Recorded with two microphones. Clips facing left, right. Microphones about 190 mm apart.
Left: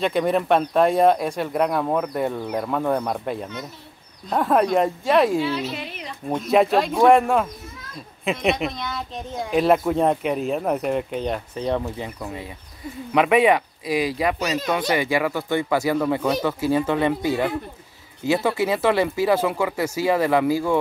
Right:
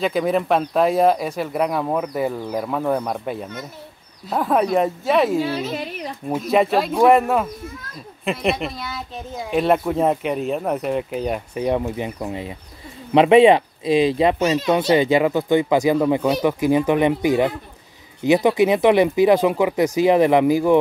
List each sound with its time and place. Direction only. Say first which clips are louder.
0.0 s speech: right 1 dB; centre (ahead or behind)
5.4 s speech: right 2 dB; 45° right (ahead or behind)
6.2 s speech: even; centre (ahead or behind); by 20.7 s 20° right (ahead or behind)